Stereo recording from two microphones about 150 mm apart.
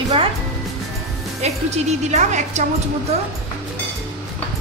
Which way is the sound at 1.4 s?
45° right (ahead or behind).